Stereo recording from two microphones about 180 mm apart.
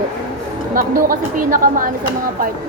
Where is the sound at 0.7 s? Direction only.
50° right (ahead or behind).